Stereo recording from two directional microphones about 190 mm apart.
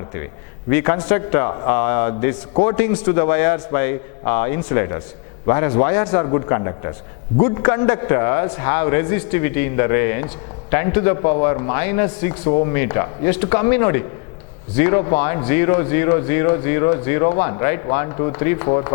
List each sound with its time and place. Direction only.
0.7 s a man's voice: 15° left (ahead or behind)